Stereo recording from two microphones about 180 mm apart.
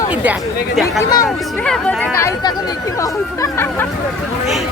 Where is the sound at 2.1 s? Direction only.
20° left (ahead or behind).